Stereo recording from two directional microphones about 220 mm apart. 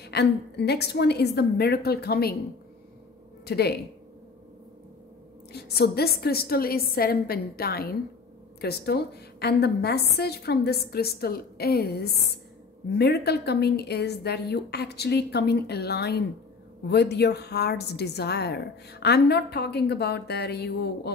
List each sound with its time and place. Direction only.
0.0 s a woman's voice: 50° left (ahead or behind)
3.4 s a woman's voice: 45° left (ahead or behind)
5.5 s a woman's voice: 45° left (ahead or behind)